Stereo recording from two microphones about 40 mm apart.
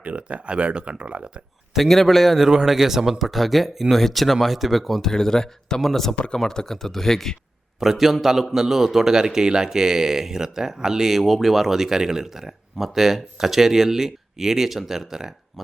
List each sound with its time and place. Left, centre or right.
0.0 s speech: right
1.7 s speech: centre
2.4 s speech: centre
5.1 s speech: centre
6.1 s speech: centre
7.8 s a man's voice: centre
11.2 s a man's voice: centre